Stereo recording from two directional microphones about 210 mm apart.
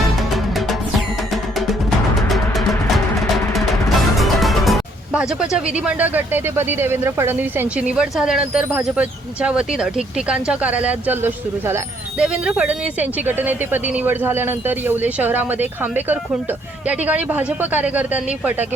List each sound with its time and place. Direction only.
0.2 s music: centre (ahead or behind)
2.3 s music: centre (ahead or behind)
3.8 s speech: centre (ahead or behind)